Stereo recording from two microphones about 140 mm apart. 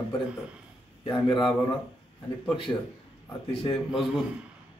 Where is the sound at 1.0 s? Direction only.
35° left (ahead or behind).